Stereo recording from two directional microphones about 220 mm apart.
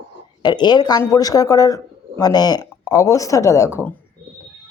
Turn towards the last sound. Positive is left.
turn(degrees=15)  # may be behind; listen again after turning